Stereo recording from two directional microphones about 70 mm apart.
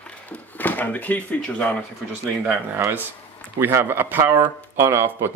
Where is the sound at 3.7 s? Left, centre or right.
Right.